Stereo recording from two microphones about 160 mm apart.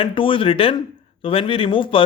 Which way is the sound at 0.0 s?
35° left (ahead or behind).